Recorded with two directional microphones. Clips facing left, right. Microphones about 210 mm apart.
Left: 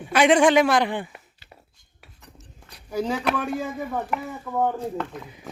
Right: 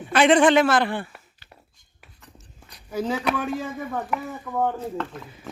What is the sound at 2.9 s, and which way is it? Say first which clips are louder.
Speech: even; 5° right (ahead or behind).